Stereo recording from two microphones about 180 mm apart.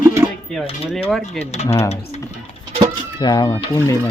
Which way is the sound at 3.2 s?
20° left (ahead or behind).